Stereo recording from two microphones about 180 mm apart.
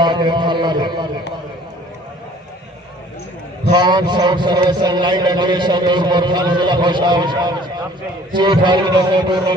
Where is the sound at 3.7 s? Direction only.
25° right (ahead or behind).